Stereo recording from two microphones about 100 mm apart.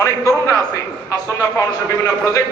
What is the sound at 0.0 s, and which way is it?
A man's voice, 30° left (ahead or behind).